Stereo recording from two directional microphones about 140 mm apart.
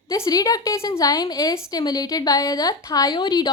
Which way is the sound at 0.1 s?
25° left (ahead or behind).